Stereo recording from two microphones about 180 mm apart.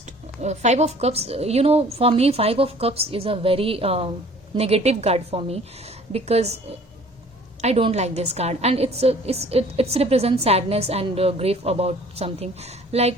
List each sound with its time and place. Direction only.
0.0 s a woman's voice: 40° right (ahead or behind)
7.6 s a woman's voice: 35° right (ahead or behind)